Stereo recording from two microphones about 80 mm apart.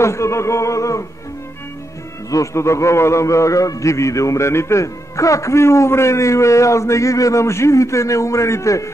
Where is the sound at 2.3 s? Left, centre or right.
Left.